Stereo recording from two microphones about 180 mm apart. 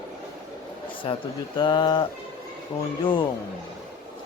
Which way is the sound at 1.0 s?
30° left (ahead or behind).